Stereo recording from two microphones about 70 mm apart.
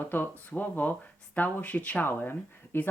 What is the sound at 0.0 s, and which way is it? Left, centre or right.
Speech, left.